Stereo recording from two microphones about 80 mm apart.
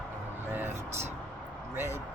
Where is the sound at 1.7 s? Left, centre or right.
Right.